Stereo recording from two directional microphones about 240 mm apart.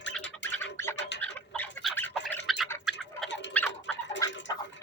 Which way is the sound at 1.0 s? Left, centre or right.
Left.